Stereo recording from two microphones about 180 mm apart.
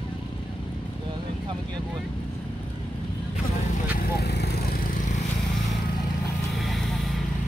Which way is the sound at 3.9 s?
60° left (ahead or behind).